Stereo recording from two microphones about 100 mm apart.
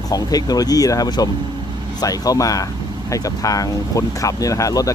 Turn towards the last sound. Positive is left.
turn(degrees=35)  # may be behind; listen again after turning